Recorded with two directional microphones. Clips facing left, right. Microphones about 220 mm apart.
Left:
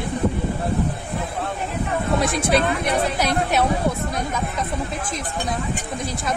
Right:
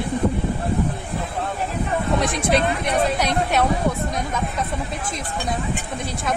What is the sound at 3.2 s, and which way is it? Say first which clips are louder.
Speech: even; centre (ahead or behind).